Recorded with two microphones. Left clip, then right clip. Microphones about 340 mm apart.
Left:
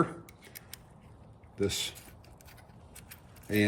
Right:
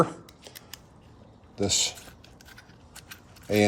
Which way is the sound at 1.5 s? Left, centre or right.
Centre.